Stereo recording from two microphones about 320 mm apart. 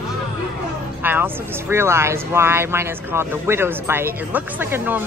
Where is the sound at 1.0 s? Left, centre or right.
Centre.